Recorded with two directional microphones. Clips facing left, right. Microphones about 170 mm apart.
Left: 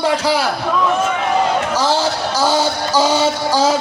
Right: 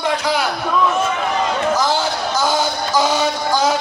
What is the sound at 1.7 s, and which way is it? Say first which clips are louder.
Speech: left 2 dB; 30° left (ahead or behind).